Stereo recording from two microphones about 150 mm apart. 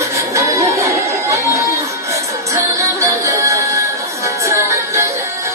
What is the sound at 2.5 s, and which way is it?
Music, 20° right (ahead or behind).